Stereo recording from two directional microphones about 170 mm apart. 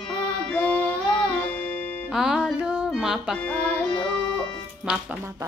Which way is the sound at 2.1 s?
5° right (ahead or behind).